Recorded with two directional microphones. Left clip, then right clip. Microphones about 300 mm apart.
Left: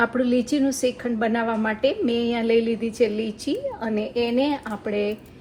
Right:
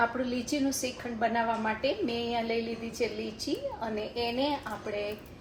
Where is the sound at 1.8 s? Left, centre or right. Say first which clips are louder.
Left 8 dB; left.